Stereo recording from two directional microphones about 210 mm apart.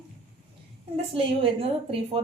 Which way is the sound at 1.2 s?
25° right (ahead or behind).